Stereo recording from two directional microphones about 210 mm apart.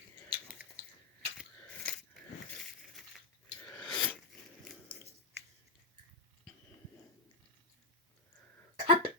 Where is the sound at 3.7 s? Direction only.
5° left (ahead or behind).